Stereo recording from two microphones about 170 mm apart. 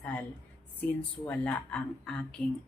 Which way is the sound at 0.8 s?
10° left (ahead or behind).